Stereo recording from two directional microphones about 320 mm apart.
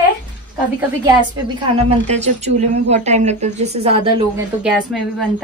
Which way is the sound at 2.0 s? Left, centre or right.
Right.